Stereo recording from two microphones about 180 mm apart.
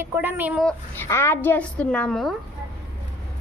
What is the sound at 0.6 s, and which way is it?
A woman's voice, 5° left (ahead or behind).